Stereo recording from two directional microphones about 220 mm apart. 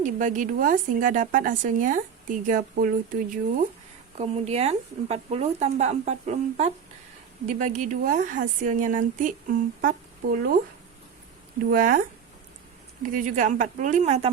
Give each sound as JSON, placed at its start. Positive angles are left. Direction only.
{"t": 0.0, "sound": "speech", "side_deg": -35}
{"t": 11.6, "sound": "speech", "side_deg": -40}